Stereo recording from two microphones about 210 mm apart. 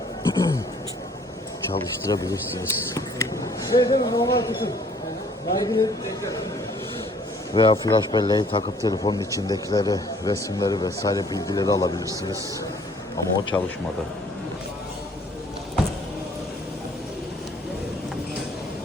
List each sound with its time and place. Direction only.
0.2 s speech: 15° left (ahead or behind)
1.7 s speech: 15° left (ahead or behind)
7.5 s speech: 20° left (ahead or behind)
13.5 s speech: 5° left (ahead or behind)